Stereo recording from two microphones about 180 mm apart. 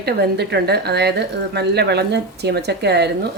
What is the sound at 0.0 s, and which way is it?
A woman's voice, 65° right (ahead or behind).